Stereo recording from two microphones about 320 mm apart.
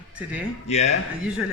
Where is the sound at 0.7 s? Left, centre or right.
Centre.